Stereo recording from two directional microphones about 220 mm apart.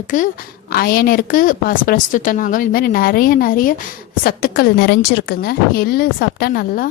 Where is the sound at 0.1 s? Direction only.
35° left (ahead or behind).